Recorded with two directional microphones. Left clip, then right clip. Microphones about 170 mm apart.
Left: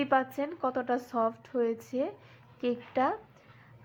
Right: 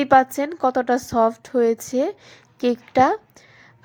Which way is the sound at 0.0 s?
50° right (ahead or behind).